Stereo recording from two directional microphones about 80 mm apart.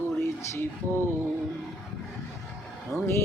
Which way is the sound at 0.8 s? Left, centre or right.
Right.